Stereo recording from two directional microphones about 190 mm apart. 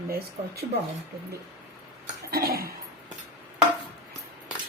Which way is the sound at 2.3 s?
55° right (ahead or behind).